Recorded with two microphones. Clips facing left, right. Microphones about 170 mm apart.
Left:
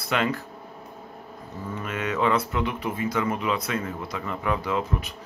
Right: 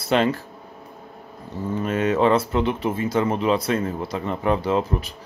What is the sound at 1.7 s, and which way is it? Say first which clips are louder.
A man's voice: right 8 dB; 30° right (ahead or behind).